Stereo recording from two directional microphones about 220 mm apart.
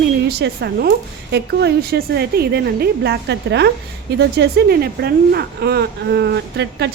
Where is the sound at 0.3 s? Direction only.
50° right (ahead or behind).